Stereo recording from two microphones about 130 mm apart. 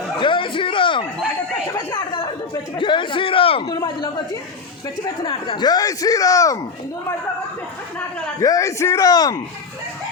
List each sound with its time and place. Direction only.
0.2 s a sound: 40° left (ahead or behind)
2.7 s a man's voice: 40° left (ahead or behind)
3.7 s speech: 30° left (ahead or behind)
5.2 s speech: 40° left (ahead or behind); by 6.6 s 25° left (ahead or behind)
8.4 s speech: 25° left (ahead or behind)